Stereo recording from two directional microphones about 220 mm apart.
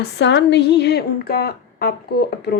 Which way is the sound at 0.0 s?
55° left (ahead or behind).